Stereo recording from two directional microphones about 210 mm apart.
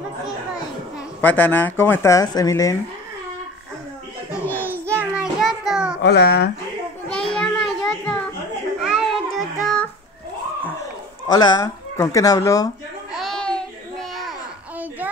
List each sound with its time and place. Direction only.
1.2 s speech: 10° left (ahead or behind)
4.6 s child singing: 10° right (ahead or behind)
6.0 s speech: 50° left (ahead or behind)
7.1 s children playing: 5° left (ahead or behind)
8.8 s child singing: centre (ahead or behind)
11.2 s speech: 20° left (ahead or behind)
13.1 s a sound: centre (ahead or behind)